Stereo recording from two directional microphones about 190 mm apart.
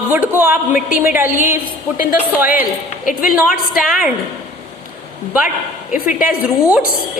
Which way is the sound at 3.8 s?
Centre (ahead or behind).